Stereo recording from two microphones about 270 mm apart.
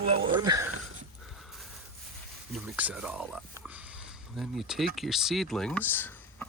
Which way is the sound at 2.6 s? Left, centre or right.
Centre.